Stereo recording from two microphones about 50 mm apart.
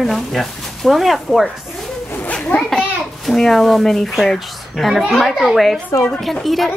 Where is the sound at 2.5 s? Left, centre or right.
Left.